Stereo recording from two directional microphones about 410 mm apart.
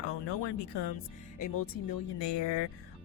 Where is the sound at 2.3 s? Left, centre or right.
Left.